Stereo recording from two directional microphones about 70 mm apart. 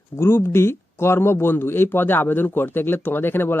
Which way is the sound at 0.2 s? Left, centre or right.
Left.